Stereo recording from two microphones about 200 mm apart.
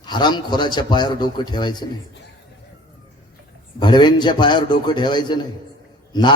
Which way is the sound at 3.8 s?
20° left (ahead or behind).